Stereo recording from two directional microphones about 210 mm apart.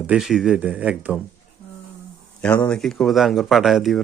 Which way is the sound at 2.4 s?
5° left (ahead or behind).